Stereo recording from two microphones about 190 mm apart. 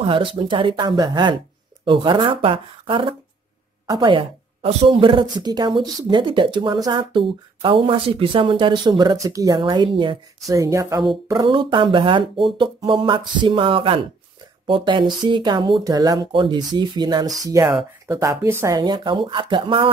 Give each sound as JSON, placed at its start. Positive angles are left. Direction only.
{"t": 0.0, "sound": "a woman's voice", "side_deg": -25}